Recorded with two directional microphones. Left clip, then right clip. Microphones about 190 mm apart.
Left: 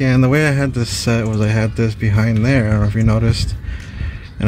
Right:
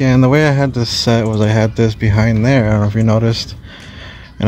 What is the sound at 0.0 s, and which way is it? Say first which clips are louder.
Speech: right 3 dB; 15° right (ahead or behind).